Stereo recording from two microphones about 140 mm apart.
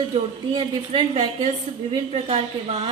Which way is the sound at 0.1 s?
40° right (ahead or behind).